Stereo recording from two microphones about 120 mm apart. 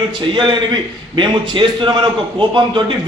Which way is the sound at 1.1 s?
40° right (ahead or behind).